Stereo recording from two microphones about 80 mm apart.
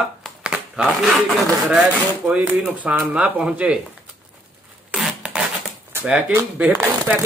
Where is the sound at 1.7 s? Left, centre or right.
Centre.